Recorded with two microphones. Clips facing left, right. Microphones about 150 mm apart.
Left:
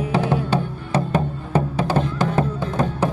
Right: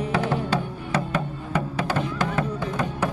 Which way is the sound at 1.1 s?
30° left (ahead or behind).